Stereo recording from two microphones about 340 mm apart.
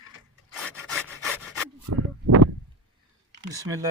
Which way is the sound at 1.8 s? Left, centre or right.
Right.